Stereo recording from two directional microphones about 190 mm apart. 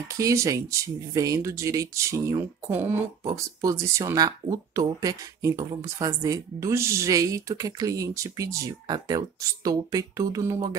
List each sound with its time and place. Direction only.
0.2 s speech: 15° right (ahead or behind)